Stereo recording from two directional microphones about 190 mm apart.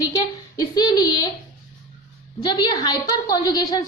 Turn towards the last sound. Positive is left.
turn(degrees=20)  # may be behind; listen again after turning